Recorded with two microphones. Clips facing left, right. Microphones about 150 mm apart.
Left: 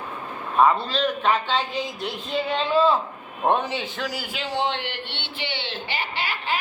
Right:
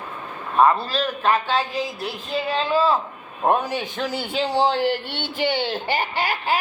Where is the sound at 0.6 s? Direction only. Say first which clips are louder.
Right 1 dB; 5° right (ahead or behind).